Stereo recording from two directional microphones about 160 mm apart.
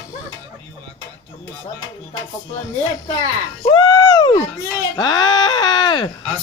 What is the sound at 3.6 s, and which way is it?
Speech, 30° left (ahead or behind).